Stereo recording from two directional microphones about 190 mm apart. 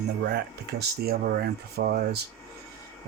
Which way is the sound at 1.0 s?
55° right (ahead or behind).